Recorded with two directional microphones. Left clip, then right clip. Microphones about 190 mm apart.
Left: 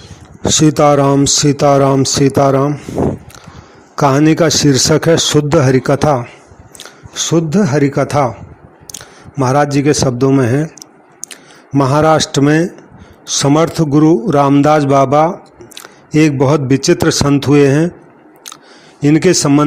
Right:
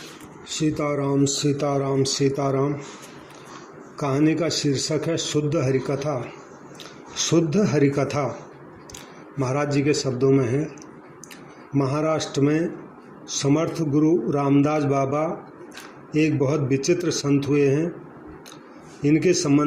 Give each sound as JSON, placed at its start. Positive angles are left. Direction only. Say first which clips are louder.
{"t": 0.4, "sound": "speech", "louder": "left 15 dB", "side_deg": 50}
{"t": 3.9, "sound": "a man's voice", "louder": "left 12 dB", "side_deg": 50}
{"t": 19.0, "sound": "speech", "louder": "left 9 dB", "side_deg": 50}